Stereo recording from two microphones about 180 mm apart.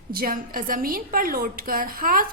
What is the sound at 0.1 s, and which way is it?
A woman's voice, 55° right (ahead or behind).